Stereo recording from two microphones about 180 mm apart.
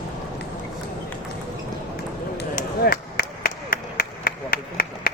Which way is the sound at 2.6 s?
55° left (ahead or behind).